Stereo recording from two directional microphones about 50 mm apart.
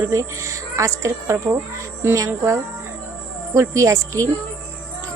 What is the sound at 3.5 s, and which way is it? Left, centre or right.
Speech, right.